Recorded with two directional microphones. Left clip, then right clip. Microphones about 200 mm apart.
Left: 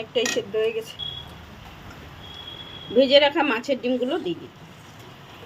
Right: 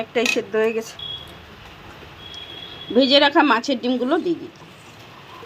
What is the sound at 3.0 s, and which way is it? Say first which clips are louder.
Speech: right 2 dB; 15° right (ahead or behind).